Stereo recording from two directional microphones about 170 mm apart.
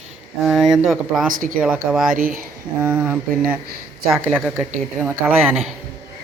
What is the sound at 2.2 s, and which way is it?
Speech, 55° right (ahead or behind).